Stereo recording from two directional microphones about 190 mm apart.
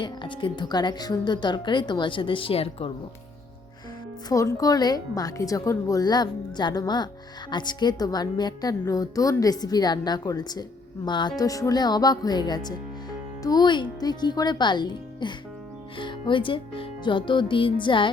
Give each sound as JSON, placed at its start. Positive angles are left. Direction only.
{"t": 0.0, "sound": "a woman's voice", "side_deg": 25}
{"t": 4.3, "sound": "a woman's voice", "side_deg": 15}